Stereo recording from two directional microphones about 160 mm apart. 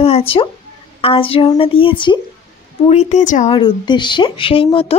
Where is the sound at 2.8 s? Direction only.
45° left (ahead or behind).